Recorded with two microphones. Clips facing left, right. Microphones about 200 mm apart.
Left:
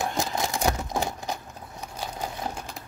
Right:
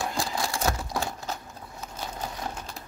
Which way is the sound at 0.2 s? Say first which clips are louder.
Left 2 dB; 20° left (ahead or behind).